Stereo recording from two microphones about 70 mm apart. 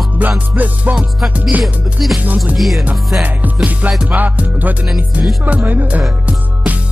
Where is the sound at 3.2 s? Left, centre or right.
Right.